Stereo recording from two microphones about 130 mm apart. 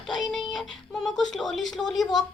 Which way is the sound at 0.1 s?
Centre (ahead or behind).